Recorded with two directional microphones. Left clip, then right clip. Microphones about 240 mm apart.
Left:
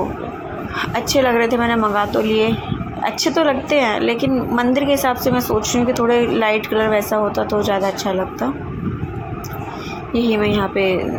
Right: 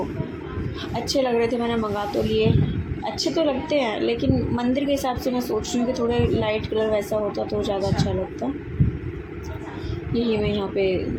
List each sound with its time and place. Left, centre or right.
0.9 s a woman's voice: centre
10.1 s a woman's voice: centre